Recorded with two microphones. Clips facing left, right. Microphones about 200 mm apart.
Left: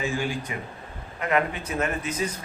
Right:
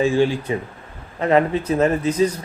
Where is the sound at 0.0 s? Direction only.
30° right (ahead or behind).